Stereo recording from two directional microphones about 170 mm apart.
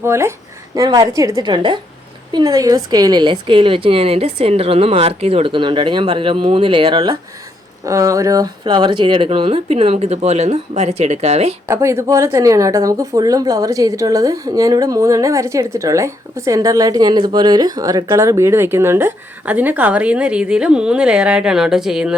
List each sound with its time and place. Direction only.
0.0 s a woman's voice: 15° right (ahead or behind)
7.9 s a woman's voice: 20° right (ahead or behind); by 11.5 s 40° right (ahead or behind)
11.7 s speech: 15° right (ahead or behind)